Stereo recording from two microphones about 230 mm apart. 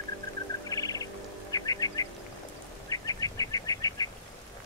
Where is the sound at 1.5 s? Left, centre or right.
Centre.